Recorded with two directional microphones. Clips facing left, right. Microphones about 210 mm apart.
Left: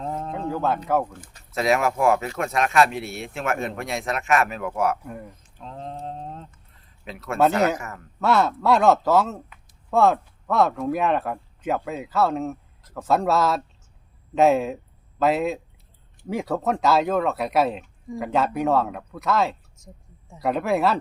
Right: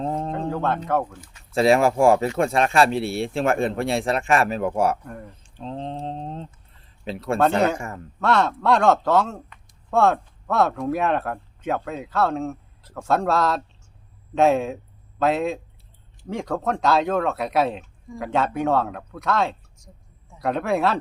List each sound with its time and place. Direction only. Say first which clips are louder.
0.3 s speech: right 1 dB; 5° left (ahead or behind)
1.2 s speech: left 1 dB; 40° left (ahead or behind)
1.5 s speech: right 4 dB; 30° right (ahead or behind)
5.0 s speech: left 1 dB; 5° left (ahead or behind)
5.3 s a sound: right 7 dB; 30° right (ahead or behind)
7.0 s speech: even; 30° right (ahead or behind)
8.2 s speech: even; 5° left (ahead or behind)